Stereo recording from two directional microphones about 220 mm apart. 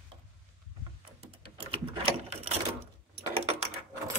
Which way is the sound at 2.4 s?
30° right (ahead or behind).